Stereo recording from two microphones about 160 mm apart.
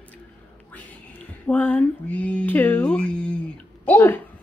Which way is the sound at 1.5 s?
10° left (ahead or behind).